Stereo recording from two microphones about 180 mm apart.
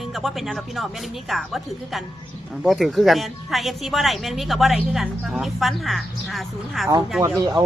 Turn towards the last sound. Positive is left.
turn(degrees=-25)  # may be behind; listen again after turning